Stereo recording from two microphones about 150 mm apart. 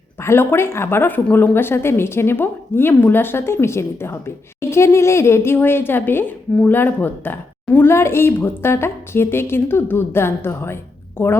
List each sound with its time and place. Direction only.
0.2 s a woman's voice: 15° left (ahead or behind)